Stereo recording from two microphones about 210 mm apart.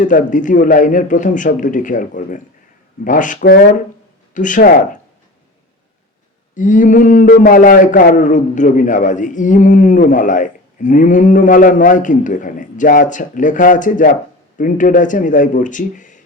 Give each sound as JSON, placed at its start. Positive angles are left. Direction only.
{"t": 0.0, "sound": "a man's voice", "side_deg": 35}
{"t": 6.5, "sound": "a man's voice", "side_deg": 35}